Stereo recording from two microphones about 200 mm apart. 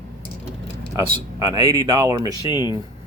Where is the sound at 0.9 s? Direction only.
20° right (ahead or behind).